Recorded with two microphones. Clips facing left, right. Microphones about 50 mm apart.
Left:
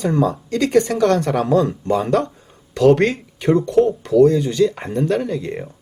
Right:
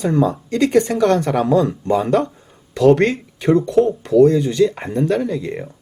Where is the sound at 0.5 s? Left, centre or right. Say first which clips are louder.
Right 1 dB; right.